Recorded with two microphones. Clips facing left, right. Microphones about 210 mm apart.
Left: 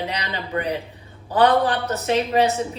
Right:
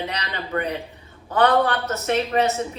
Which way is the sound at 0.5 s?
15° left (ahead or behind).